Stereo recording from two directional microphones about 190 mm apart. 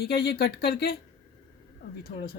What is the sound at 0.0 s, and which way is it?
Speech, 55° left (ahead or behind).